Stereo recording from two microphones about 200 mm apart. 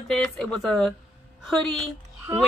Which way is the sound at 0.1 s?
Centre (ahead or behind).